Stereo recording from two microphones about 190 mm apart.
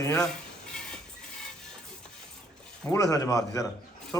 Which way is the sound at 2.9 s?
20° left (ahead or behind).